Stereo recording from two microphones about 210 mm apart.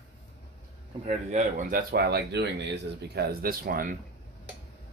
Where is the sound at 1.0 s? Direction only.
35° right (ahead or behind).